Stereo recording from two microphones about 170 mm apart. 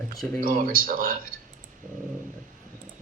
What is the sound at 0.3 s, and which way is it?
Speech, 55° right (ahead or behind).